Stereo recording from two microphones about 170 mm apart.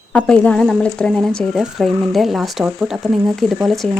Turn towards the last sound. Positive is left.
turn(degrees=0)  # may be behind; listen again after turning